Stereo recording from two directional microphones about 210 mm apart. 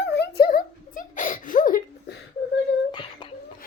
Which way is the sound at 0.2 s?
45° left (ahead or behind).